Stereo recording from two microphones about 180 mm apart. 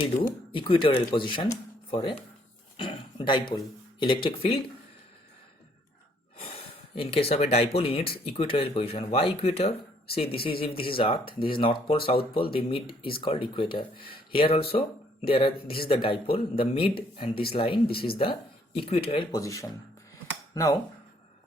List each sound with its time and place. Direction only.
0.0 s speech: 30° left (ahead or behind)
6.3 s speech: 30° left (ahead or behind)